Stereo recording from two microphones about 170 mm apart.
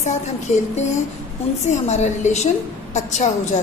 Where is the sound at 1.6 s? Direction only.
40° left (ahead or behind).